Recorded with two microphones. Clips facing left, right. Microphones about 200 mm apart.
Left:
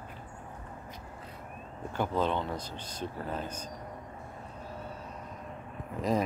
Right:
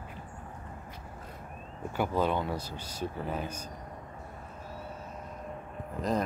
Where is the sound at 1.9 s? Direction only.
10° right (ahead or behind).